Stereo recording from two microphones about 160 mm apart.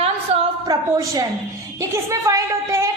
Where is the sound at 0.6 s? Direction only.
25° right (ahead or behind).